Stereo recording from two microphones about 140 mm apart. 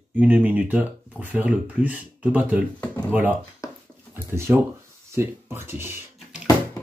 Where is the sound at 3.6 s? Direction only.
20° left (ahead or behind).